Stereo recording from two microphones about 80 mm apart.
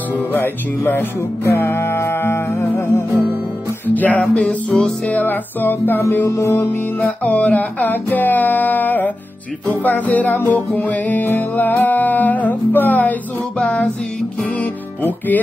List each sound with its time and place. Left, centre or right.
0.1 s music: left
3.1 s music: right
3.8 s music: left
6.5 s music: left